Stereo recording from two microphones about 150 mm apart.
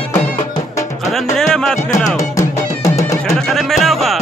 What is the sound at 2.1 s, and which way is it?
Music, 20° left (ahead or behind).